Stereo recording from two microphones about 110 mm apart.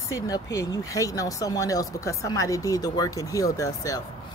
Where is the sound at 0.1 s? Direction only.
30° left (ahead or behind).